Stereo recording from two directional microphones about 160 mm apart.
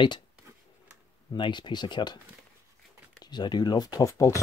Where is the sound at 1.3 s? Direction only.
30° left (ahead or behind).